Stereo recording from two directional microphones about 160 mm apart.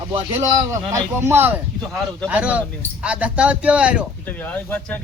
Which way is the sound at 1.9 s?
Centre (ahead or behind).